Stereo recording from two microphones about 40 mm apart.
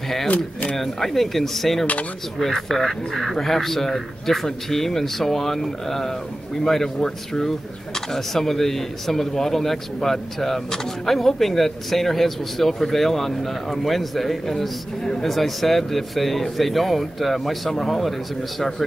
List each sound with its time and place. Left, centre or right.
0.7 s speech: centre